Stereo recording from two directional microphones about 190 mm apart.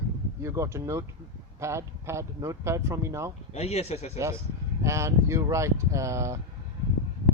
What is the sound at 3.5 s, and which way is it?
Speech, 35° left (ahead or behind).